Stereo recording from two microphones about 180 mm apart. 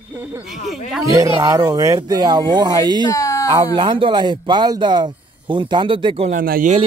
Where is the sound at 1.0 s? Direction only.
20° right (ahead or behind).